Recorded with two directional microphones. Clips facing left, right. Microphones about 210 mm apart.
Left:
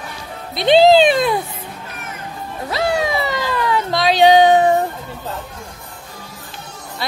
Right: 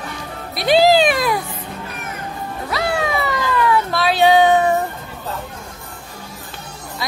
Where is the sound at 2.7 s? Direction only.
25° left (ahead or behind).